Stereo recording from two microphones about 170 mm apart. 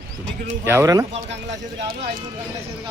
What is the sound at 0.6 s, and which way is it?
Speech, 15° right (ahead or behind).